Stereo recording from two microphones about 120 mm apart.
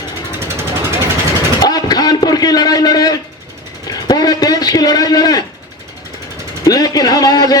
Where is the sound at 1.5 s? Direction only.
35° left (ahead or behind).